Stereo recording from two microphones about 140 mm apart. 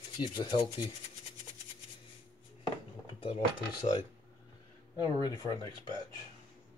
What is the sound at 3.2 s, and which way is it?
Speech, 35° left (ahead or behind).